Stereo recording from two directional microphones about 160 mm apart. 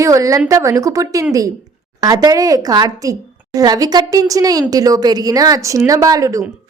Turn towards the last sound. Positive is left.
turn(degrees=-20)  # may be behind; listen again after turning